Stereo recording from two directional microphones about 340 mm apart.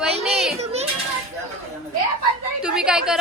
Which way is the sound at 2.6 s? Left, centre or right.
Centre.